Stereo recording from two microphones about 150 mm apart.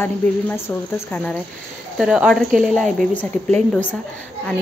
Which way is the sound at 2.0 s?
5° right (ahead or behind).